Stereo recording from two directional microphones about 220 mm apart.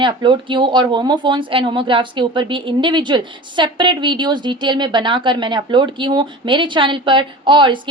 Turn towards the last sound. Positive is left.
turn(degrees=-20)  # may be behind; listen again after turning